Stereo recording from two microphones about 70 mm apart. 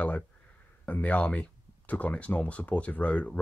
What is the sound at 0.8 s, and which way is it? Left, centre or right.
Speech, left.